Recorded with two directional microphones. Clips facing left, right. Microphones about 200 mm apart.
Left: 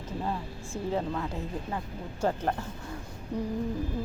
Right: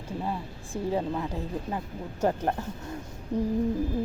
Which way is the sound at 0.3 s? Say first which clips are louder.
Even; 15° right (ahead or behind).